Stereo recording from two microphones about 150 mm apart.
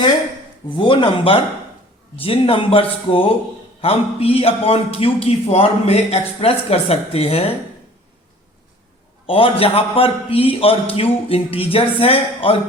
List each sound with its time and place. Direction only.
0.8 s a man's voice: 35° left (ahead or behind)
9.2 s a man's voice: 35° left (ahead or behind)